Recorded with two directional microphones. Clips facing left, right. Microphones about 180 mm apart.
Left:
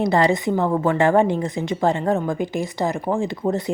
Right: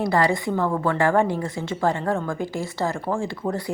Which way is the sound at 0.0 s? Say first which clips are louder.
Left 3 dB; 20° left (ahead or behind).